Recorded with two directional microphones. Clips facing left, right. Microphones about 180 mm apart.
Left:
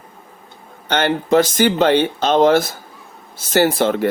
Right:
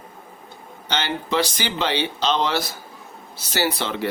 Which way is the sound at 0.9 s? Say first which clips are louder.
Left 9 dB; 55° left (ahead or behind).